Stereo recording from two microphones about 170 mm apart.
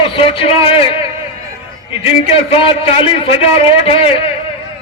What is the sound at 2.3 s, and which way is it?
A man's voice, 35° left (ahead or behind).